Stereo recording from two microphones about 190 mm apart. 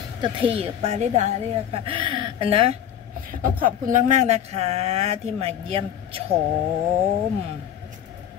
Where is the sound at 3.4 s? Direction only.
45° right (ahead or behind).